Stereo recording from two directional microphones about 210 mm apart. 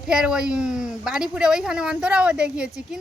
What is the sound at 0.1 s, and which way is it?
Speech, 5° right (ahead or behind).